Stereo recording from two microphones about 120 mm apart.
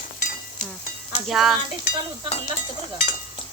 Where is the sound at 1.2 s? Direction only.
Centre (ahead or behind).